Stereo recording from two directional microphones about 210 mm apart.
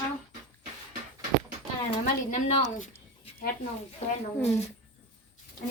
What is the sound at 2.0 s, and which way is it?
Speech, 35° left (ahead or behind).